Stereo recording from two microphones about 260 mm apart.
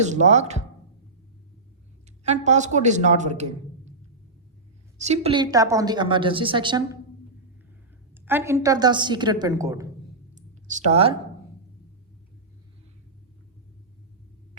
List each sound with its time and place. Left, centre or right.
0.1 s a woman's voice: right
2.2 s a woman's voice: right
4.9 s a woman's voice: right
8.1 s a woman's voice: centre
10.3 s a sound: right